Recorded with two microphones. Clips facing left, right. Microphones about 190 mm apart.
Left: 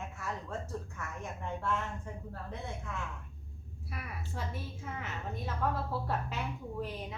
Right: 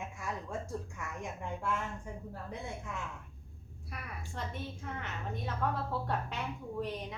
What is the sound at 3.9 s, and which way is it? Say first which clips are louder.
A woman's voice: left 1 dB; centre (ahead or behind).